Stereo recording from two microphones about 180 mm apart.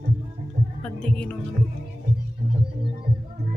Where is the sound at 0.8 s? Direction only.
5° left (ahead or behind).